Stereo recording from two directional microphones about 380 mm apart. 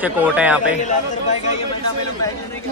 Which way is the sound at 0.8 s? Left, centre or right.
Centre.